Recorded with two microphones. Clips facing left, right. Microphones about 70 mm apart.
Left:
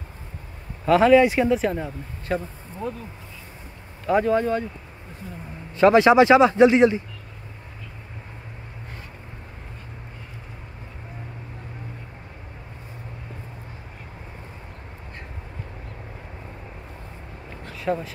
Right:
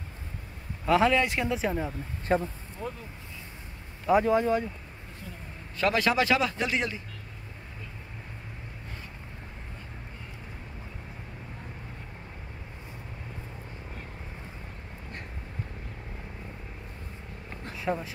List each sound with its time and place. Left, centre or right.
0.8 s speech: centre
1.6 s speech: centre
2.3 s speech: right
4.0 s speech: centre
5.8 s a man's voice: left
17.7 s speech: centre